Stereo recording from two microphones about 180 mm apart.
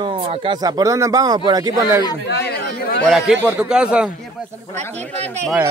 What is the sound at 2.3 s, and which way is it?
Chatter, 65° left (ahead or behind).